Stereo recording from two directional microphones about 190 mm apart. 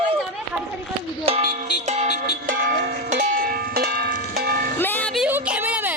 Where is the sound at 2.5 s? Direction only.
45° right (ahead or behind).